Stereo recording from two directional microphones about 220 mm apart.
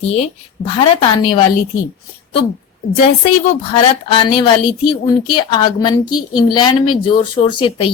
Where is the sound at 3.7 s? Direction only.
25° left (ahead or behind).